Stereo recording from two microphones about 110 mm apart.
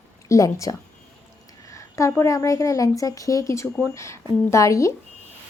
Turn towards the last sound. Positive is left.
turn(degrees=30)  # may be behind; listen again after turning